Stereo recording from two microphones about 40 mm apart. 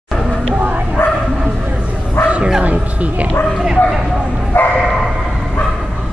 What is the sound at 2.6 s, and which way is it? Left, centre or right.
Speech, right.